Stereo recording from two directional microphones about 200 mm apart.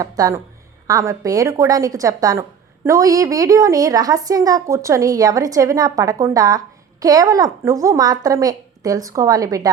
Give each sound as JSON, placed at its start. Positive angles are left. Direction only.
{"t": 0.0, "sound": "a woman's voice", "side_deg": -20}